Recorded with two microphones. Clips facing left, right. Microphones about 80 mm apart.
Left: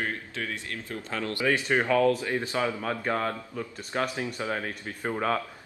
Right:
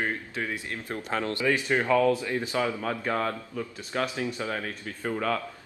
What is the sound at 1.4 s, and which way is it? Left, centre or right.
Speech, centre.